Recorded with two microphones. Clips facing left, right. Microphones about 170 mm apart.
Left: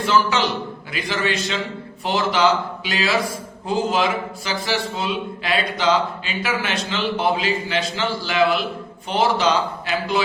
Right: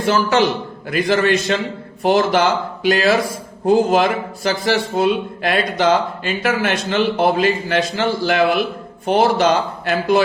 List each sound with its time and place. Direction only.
0.0 s a man's voice: 50° right (ahead or behind)